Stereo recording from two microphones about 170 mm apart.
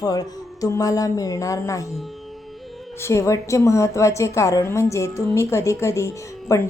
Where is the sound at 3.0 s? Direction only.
15° left (ahead or behind).